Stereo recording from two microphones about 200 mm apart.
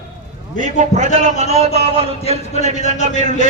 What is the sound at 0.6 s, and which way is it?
A man's voice, 40° right (ahead or behind).